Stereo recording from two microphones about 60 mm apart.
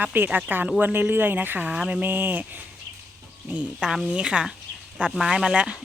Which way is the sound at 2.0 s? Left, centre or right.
Right.